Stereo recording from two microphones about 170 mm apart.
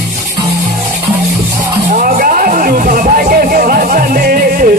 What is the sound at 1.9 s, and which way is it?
Music, 55° right (ahead or behind).